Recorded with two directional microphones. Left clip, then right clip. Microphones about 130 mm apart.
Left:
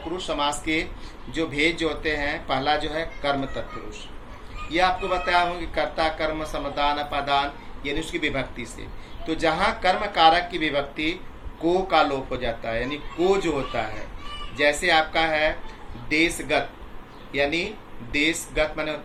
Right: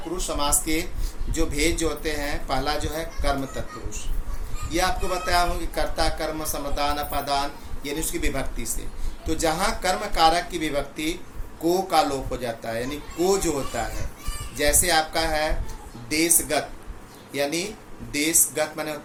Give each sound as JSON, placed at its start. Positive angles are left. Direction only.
{"t": 0.2, "sound": "speech", "side_deg": -35}